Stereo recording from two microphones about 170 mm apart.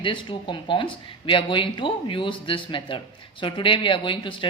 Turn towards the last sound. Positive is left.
turn(degrees=30)  # may be behind; listen again after turning